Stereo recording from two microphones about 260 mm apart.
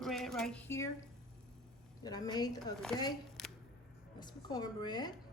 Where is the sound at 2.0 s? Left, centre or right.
Centre.